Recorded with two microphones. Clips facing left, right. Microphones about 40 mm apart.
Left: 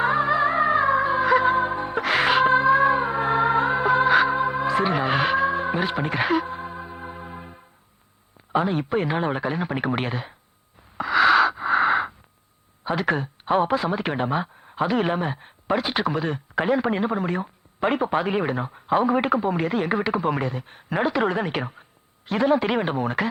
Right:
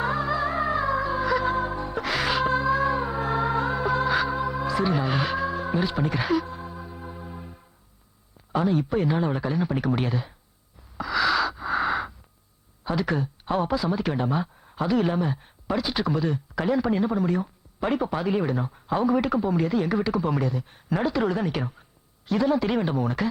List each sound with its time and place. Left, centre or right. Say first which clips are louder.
0.0 s music: left 5 dB; left
8.5 s speech: left 1 dB; left
10.9 s a sound: left 6 dB; left
12.8 s speech: left 2 dB; left